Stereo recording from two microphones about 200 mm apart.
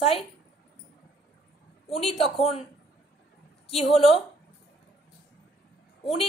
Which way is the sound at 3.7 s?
30° left (ahead or behind).